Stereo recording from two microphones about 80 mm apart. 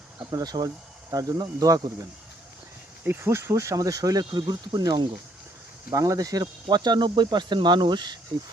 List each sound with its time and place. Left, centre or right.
0.2 s speech: right
3.0 s speech: right
5.9 s speech: right